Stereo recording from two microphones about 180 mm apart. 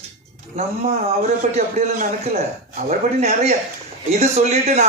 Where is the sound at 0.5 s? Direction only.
35° right (ahead or behind).